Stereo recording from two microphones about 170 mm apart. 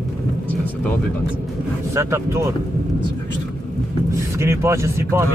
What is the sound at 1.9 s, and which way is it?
Speech, 15° right (ahead or behind).